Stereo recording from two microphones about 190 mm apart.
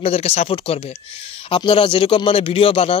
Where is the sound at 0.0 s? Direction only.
35° left (ahead or behind).